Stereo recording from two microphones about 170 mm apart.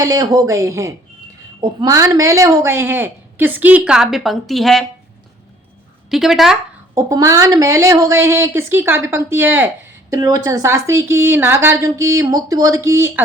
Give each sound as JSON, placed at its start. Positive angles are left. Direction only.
{"t": 0.0, "sound": "speech", "side_deg": -20}
{"t": 6.1, "sound": "speech", "side_deg": 0}
{"t": 6.9, "sound": "speech", "side_deg": -20}